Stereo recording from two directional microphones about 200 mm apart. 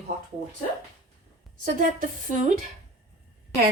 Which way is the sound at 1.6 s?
40° right (ahead or behind).